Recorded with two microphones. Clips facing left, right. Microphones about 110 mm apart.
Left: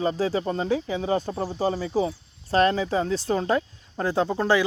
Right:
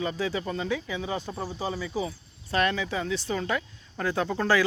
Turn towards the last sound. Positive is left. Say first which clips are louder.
# left 3 dB
turn(degrees=20)  # may be behind; listen again after turning